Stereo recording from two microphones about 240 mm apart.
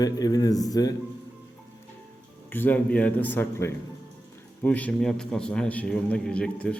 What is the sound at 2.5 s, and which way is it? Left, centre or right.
A man's voice, centre.